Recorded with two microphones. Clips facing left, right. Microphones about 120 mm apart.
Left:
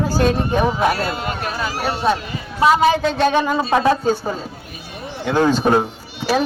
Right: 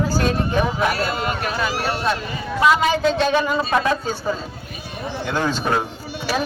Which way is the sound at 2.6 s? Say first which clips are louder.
Left 3 dB; 35° left (ahead or behind).